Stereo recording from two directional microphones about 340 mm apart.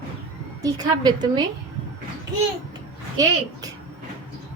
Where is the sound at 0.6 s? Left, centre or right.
Centre.